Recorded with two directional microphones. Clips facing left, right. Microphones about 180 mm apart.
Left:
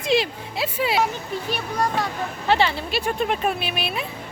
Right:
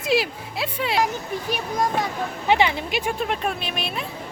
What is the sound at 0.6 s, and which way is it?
Speech, 5° left (ahead or behind).